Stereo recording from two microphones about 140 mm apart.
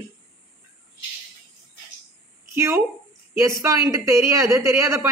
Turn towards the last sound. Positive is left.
turn(degrees=-20)  # may be behind; listen again after turning